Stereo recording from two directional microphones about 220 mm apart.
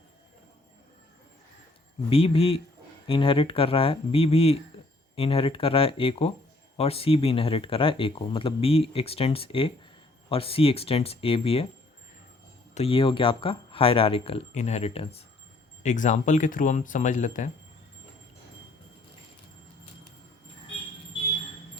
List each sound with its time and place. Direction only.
2.0 s speech: 25° left (ahead or behind)
12.7 s speech: 25° left (ahead or behind)